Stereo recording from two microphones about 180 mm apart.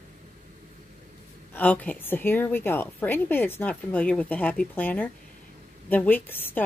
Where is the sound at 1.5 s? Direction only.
10° left (ahead or behind).